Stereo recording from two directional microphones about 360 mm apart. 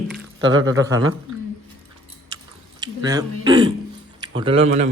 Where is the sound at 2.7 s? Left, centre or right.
Centre.